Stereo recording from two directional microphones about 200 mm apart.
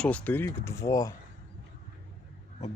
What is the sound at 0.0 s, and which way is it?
Speech, 5° left (ahead or behind).